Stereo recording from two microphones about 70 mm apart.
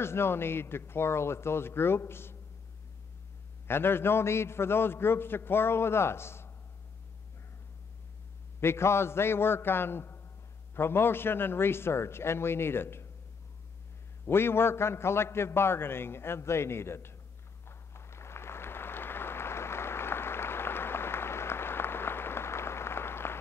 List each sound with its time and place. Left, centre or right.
0.0 s a man's voice: left
3.6 s a man's voice: left
8.5 s a man's voice: left
14.3 s a man's voice: left
17.6 s a sound: left